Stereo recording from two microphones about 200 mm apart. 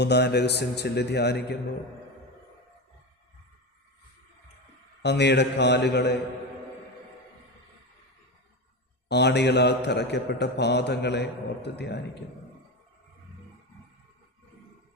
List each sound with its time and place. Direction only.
0.0 s a man's voice: 55° left (ahead or behind)
5.0 s a man's voice: 60° left (ahead or behind)
9.0 s a man's voice: 60° left (ahead or behind)